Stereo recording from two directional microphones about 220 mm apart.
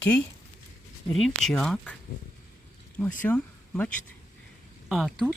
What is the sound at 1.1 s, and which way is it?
Speech, centre (ahead or behind).